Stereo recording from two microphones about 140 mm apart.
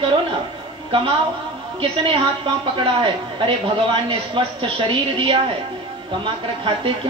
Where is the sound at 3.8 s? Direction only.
40° right (ahead or behind).